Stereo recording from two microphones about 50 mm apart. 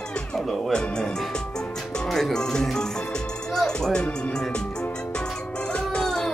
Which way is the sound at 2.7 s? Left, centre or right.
Centre.